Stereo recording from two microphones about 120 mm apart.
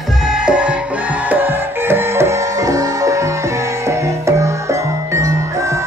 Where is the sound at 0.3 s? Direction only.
5° right (ahead or behind).